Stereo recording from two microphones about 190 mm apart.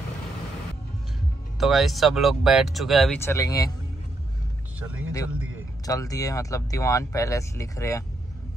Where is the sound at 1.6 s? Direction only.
Centre (ahead or behind).